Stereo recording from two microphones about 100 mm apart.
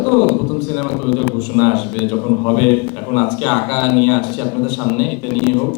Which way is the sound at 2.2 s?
25° left (ahead or behind).